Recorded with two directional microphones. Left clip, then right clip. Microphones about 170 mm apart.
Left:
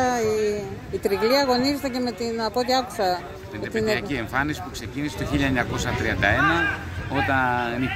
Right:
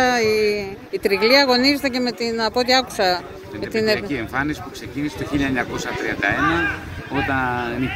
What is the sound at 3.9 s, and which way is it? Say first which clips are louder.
Speech: right 2 dB; 25° left (ahead or behind).